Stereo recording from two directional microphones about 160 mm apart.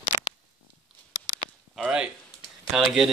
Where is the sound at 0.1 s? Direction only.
35° left (ahead or behind).